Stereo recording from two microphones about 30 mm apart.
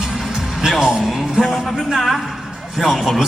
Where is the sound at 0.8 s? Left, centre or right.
Right.